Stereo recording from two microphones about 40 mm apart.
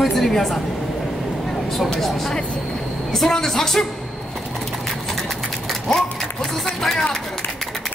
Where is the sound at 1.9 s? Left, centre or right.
Centre.